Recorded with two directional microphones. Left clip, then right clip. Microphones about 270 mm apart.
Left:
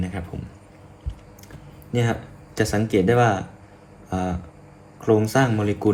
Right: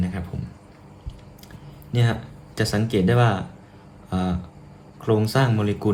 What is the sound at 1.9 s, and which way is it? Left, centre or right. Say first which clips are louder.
Speech: left 2 dB; centre.